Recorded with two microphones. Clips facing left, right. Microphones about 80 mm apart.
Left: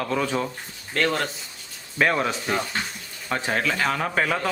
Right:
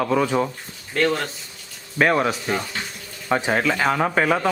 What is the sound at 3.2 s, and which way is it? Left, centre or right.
Speech, centre.